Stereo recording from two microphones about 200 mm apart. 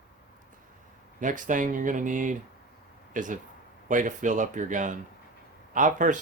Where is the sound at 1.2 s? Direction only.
40° right (ahead or behind).